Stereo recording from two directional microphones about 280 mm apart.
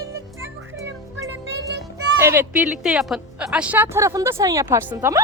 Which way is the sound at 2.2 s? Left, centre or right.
Centre.